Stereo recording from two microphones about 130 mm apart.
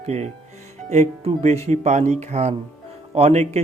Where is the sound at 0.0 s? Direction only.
55° right (ahead or behind).